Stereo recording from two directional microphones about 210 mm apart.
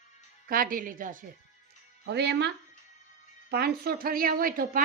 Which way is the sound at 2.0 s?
55° right (ahead or behind).